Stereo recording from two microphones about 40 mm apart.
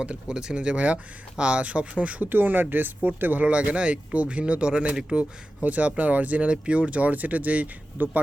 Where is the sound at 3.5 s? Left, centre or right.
Right.